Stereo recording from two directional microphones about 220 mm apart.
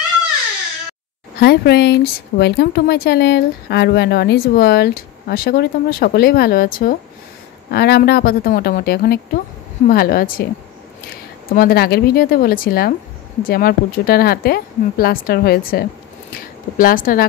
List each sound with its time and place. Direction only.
1.4 s a woman's voice: 45° left (ahead or behind)
11.5 s a woman's voice: 45° left (ahead or behind)